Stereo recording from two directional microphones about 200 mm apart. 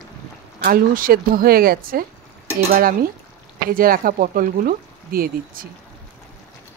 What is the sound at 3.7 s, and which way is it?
Speech, 45° right (ahead or behind).